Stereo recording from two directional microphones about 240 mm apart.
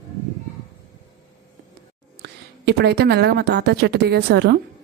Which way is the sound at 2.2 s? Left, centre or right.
Right.